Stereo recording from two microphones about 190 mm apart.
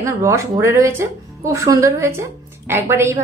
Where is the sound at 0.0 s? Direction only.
15° right (ahead or behind).